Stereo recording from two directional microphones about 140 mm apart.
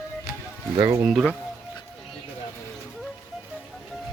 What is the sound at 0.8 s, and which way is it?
Speech, 20° right (ahead or behind).